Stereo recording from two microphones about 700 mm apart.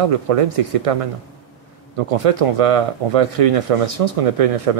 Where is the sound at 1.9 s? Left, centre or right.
Right.